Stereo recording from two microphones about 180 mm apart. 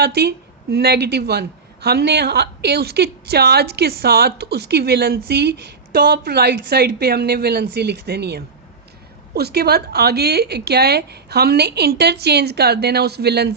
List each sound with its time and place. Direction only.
0.0 s a woman's voice: 65° right (ahead or behind)